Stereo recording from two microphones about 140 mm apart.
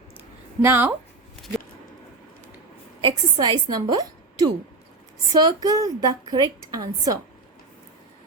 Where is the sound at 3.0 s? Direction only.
30° right (ahead or behind).